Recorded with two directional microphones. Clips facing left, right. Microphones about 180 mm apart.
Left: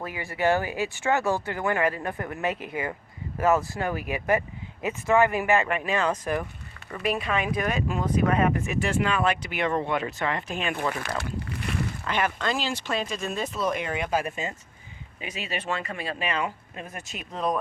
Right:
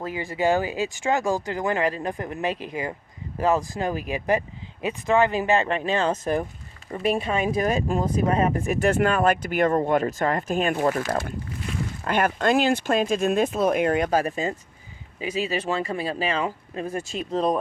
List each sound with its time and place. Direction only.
0.0 s speech: 20° right (ahead or behind); by 8.8 s 35° right (ahead or behind)
8.8 s speech: 50° right (ahead or behind)
11.3 s speech: 70° left (ahead or behind)
12.0 s speech: 50° right (ahead or behind); by 17.6 s 30° right (ahead or behind)